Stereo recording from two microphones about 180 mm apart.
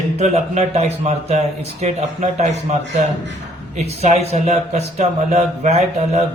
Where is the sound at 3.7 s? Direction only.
35° right (ahead or behind).